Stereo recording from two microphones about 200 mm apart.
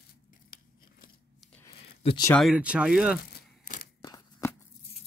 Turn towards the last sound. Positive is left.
turn(degrees=15)  # may be behind; listen again after turning